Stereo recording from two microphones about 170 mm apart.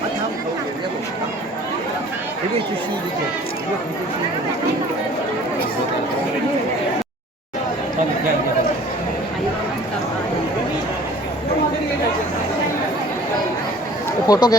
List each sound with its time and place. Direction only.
14.3 s speech: 25° left (ahead or behind)